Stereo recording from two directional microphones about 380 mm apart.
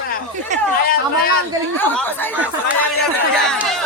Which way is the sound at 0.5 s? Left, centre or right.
Centre.